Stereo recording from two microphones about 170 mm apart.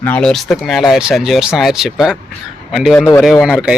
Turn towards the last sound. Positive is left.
turn(degrees=-5)  # may be behind; listen again after turning